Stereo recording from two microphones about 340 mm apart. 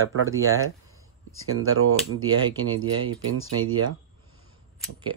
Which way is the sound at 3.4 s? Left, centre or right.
Right.